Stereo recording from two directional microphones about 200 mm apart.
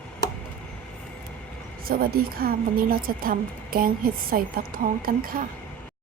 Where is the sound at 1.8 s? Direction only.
45° right (ahead or behind).